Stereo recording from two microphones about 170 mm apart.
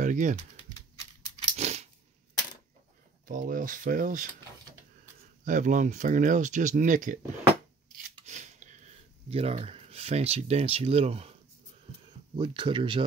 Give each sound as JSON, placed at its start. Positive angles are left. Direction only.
{"t": 0.0, "sound": "speech", "side_deg": -45}
{"t": 1.6, "sound": "a sound", "side_deg": -40}
{"t": 3.3, "sound": "speech", "side_deg": -55}
{"t": 5.4, "sound": "speech", "side_deg": -45}
{"t": 8.3, "sound": "a sound", "side_deg": -45}
{"t": 9.3, "sound": "speech", "side_deg": -35}
{"t": 12.4, "sound": "speech", "side_deg": -30}